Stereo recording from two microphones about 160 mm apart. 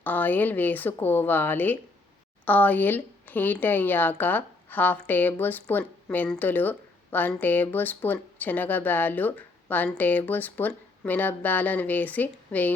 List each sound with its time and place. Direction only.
0.0 s speech: 10° left (ahead or behind)